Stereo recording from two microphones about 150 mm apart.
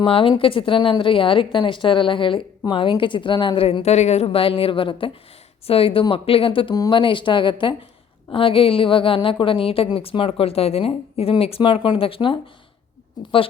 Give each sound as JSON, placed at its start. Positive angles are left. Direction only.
{"t": 0.0, "sound": "speech", "side_deg": 35}